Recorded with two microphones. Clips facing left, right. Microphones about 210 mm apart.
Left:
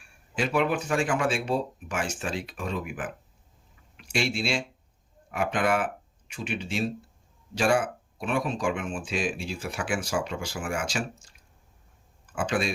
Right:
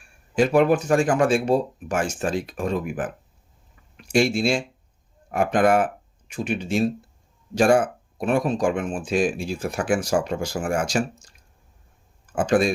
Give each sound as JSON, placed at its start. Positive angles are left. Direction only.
{"t": 0.3, "sound": "speech", "side_deg": -45}